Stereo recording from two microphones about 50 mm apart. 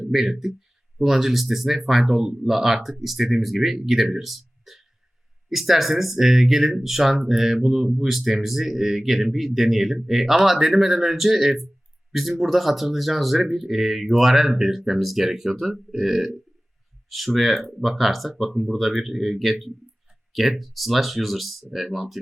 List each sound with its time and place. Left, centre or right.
0.1 s speech: centre
2.2 s speech: centre
2.5 s speech: centre